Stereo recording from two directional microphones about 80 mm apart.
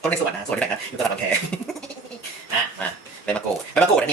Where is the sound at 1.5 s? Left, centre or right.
Centre.